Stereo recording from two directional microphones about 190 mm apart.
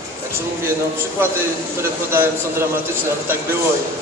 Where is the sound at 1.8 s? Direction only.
15° right (ahead or behind).